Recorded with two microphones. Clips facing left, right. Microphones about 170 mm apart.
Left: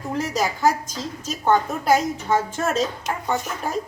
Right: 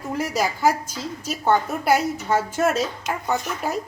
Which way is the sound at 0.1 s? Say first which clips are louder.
Even; 10° right (ahead or behind).